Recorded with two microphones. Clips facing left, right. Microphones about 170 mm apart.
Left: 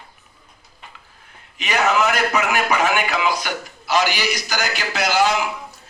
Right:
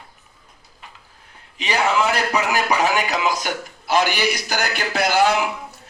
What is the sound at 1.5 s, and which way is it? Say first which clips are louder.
A man's voice: left 1 dB; 30° right (ahead or behind).